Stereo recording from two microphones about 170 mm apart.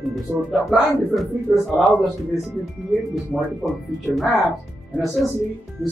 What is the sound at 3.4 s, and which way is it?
Speech, centre (ahead or behind).